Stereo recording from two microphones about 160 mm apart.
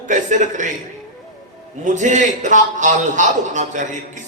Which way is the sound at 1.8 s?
50° right (ahead or behind).